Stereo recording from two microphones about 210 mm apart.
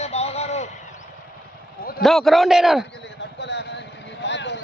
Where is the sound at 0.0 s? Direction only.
30° left (ahead or behind).